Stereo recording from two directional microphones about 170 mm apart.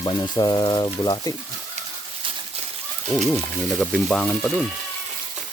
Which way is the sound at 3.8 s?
5° left (ahead or behind).